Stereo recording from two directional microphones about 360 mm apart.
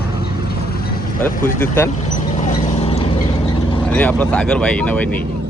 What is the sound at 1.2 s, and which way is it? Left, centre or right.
Speech, centre.